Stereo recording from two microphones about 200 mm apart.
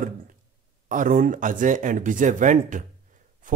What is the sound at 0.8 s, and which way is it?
Speech, 40° right (ahead or behind).